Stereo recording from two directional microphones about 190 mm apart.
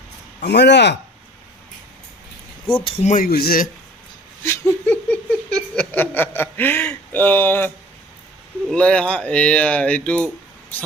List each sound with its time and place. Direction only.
0.3 s speech: 60° left (ahead or behind)
2.8 s speech: 40° left (ahead or behind)
4.4 s laughter: 10° left (ahead or behind)
5.9 s speech: 10° left (ahead or behind)
8.7 s speech: 5° left (ahead or behind)